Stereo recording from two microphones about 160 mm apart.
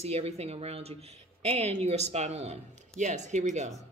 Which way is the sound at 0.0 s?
40° right (ahead or behind).